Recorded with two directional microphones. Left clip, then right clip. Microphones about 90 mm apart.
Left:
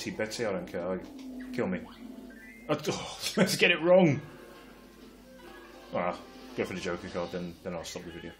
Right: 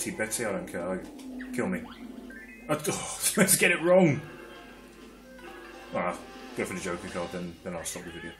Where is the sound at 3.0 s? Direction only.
Centre (ahead or behind).